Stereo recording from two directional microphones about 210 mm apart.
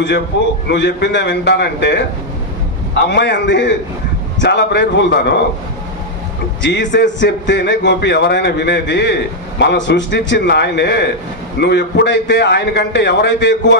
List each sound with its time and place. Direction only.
0.7 s a man's voice: 55° left (ahead or behind)
6.6 s a man's voice: 55° left (ahead or behind)